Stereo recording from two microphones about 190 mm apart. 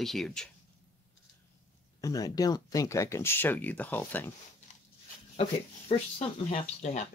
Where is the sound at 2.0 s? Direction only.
20° left (ahead or behind).